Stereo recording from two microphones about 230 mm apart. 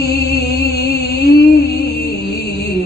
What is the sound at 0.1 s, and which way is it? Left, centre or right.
Music, left.